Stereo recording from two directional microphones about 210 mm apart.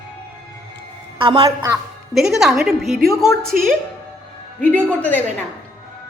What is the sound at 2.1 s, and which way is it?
A woman's voice, centre (ahead or behind).